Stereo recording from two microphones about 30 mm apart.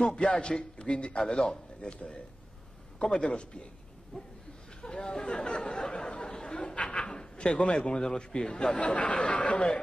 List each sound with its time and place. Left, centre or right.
0.1 s a man's voice: left
1.8 s a man's voice: left
4.8 s chatter: left
5.9 s a sound: left
6.8 s speech: left